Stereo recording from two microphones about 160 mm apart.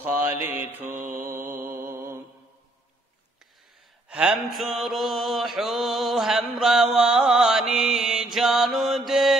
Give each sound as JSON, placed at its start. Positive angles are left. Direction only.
{"t": 0.0, "sound": "mantra", "side_deg": -10}
{"t": 0.9, "sound": "mantra", "side_deg": -55}
{"t": 1.2, "sound": "mantra", "side_deg": -15}
{"t": 4.1, "sound": "mantra", "side_deg": -5}